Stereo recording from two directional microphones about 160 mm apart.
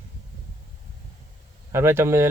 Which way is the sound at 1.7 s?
15° right (ahead or behind).